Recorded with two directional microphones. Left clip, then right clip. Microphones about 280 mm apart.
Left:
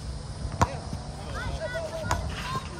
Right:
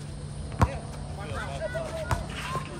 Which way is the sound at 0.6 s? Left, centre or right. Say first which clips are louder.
Left 2 dB; left.